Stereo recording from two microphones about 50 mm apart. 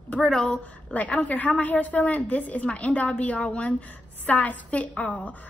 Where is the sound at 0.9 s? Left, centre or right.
Left.